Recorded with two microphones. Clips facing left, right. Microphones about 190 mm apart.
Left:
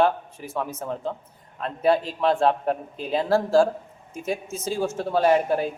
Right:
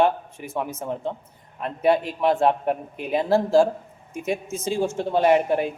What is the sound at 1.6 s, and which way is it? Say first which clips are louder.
Speech: right 1 dB; 15° right (ahead or behind).